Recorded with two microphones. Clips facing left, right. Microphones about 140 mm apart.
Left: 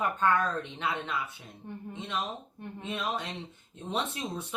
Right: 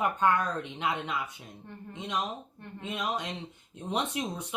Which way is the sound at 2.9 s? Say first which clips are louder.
Right 1 dB; 15° right (ahead or behind).